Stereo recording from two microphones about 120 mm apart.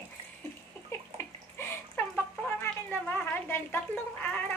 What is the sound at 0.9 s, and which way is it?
Bathtub, 25° left (ahead or behind).